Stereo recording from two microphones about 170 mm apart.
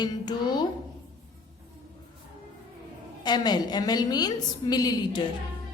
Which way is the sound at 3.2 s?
25° left (ahead or behind).